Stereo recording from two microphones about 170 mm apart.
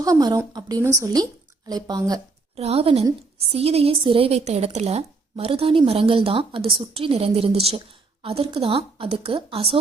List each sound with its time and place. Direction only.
0.0 s speech: 20° right (ahead or behind)
2.6 s a woman's voice: 35° right (ahead or behind)